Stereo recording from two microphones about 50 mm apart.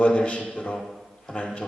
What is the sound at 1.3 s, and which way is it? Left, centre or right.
Speech, centre.